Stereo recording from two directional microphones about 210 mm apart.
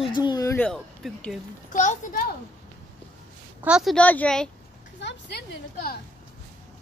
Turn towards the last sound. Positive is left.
turn(degrees=50)  # may be behind; listen again after turning